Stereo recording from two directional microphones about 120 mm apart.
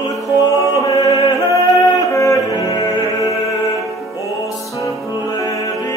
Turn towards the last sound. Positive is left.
turn(degrees=30)  # may be behind; listen again after turning